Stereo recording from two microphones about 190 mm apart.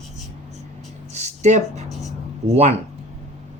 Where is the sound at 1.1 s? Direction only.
35° right (ahead or behind).